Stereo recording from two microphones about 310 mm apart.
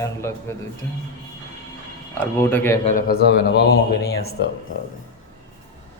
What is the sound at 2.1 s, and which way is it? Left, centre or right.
Speech, centre.